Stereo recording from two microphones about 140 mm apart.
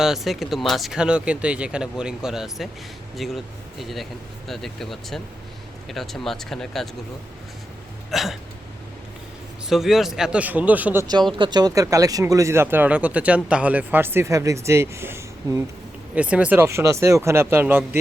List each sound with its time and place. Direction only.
0.0 s speech: centre (ahead or behind)
8.1 s speech: centre (ahead or behind)
9.6 s speech: centre (ahead or behind)
11.3 s speech: 30° right (ahead or behind); by 18.0 s 15° right (ahead or behind)